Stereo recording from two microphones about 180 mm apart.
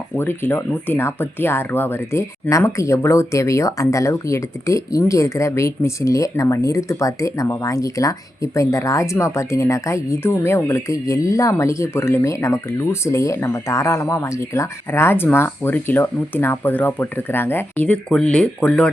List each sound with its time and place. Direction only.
0.2 s speech: 10° left (ahead or behind)